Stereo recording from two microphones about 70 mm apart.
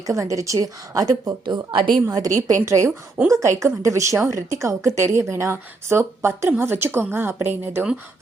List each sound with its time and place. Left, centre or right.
0.0 s a woman's voice: right
2.0 s a woman's voice: right